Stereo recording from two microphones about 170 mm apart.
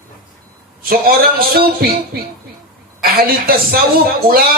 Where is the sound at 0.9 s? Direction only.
60° right (ahead or behind).